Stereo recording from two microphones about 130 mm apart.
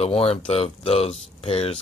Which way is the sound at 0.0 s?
50° left (ahead or behind).